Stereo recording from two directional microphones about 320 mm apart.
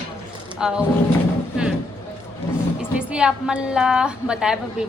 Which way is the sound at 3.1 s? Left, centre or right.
Centre.